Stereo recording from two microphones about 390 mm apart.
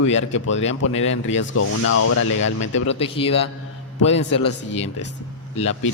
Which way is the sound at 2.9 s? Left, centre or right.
Centre.